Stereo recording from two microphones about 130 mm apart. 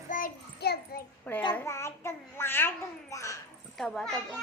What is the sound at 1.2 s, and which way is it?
A child's voice, 10° left (ahead or behind).